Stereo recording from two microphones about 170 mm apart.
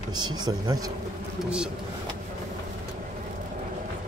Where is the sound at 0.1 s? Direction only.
25° right (ahead or behind).